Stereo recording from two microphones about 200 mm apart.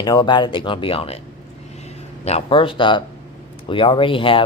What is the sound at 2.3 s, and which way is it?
Speech, 30° left (ahead or behind).